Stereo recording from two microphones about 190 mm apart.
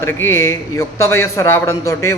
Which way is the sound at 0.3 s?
15° left (ahead or behind).